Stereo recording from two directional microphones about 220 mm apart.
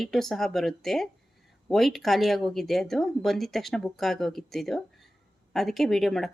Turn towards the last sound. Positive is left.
turn(degrees=0)  # may be behind; listen again after turning